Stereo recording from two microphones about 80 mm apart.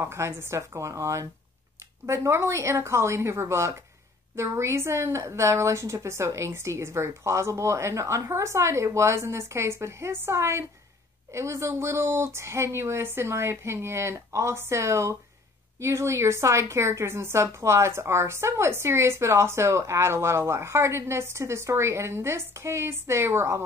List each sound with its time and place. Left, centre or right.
0.0 s a woman's voice: right